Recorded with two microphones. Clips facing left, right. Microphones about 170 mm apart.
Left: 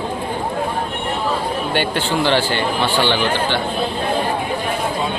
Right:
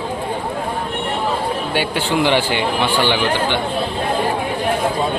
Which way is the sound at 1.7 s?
10° right (ahead or behind).